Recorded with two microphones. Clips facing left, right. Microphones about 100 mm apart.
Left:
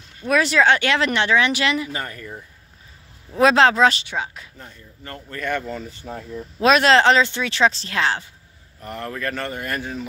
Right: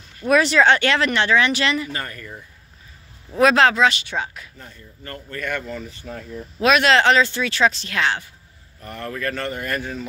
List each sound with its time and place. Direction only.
0.3 s speech: centre (ahead or behind); by 2.3 s 20° left (ahead or behind)
3.3 s speech: 25° left (ahead or behind)
3.7 s speech: 40° left (ahead or behind)
4.0 s speech: 10° left (ahead or behind)